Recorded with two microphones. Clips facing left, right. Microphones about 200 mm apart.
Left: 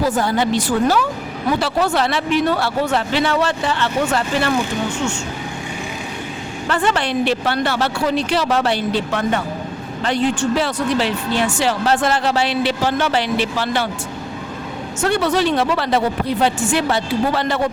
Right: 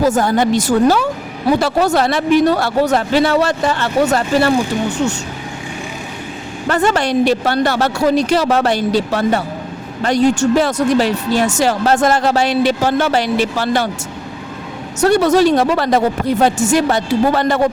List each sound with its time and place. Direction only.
0.0 s speech: 45° right (ahead or behind)
6.7 s speech: 40° right (ahead or behind)
15.0 s speech: 40° right (ahead or behind)